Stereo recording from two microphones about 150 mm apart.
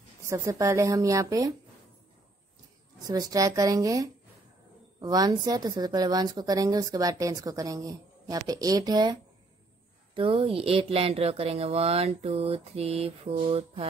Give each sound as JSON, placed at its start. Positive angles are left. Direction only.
{"t": 0.2, "sound": "speech", "side_deg": -20}
{"t": 3.1, "sound": "speech", "side_deg": -25}